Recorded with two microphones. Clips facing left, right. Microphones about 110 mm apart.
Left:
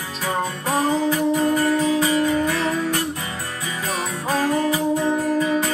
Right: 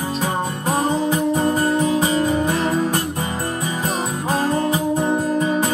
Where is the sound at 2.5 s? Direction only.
35° right (ahead or behind).